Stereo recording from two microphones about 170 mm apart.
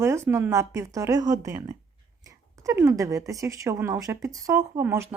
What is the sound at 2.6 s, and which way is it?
Speech, 15° right (ahead or behind).